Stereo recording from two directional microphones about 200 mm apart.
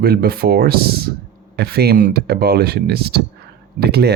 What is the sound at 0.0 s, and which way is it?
Speech, 50° right (ahead or behind).